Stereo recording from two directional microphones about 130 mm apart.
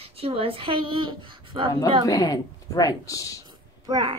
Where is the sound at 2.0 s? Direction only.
25° left (ahead or behind).